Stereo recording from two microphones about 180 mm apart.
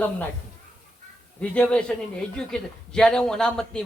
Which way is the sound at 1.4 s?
5° left (ahead or behind).